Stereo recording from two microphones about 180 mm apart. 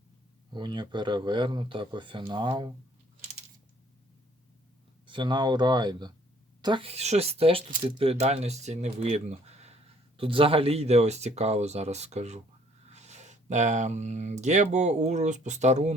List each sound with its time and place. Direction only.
0.5 s speech: 25° right (ahead or behind)
5.0 s speech: 25° right (ahead or behind)